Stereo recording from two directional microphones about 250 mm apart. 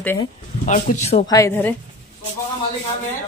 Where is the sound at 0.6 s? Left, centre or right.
Left.